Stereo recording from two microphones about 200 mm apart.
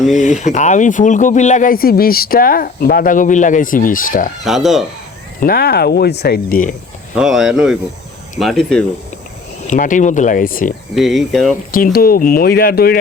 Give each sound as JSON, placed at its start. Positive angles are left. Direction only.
{"t": 0.2, "sound": "speech", "side_deg": 40}
{"t": 4.4, "sound": "speech", "side_deg": 0}
{"t": 5.4, "sound": "speech", "side_deg": 50}
{"t": 7.2, "sound": "speech", "side_deg": -5}
{"t": 9.6, "sound": "speech", "side_deg": 40}
{"t": 10.9, "sound": "speech", "side_deg": 0}
{"t": 11.7, "sound": "speech", "side_deg": 45}